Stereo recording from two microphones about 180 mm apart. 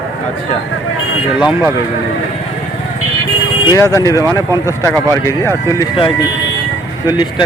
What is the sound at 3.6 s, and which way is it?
Speech, 20° left (ahead or behind).